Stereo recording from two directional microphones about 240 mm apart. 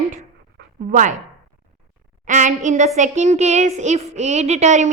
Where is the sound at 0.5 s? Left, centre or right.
Right.